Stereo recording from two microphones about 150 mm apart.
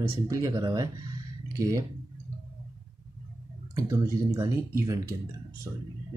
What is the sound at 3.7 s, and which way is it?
Speech, 20° right (ahead or behind).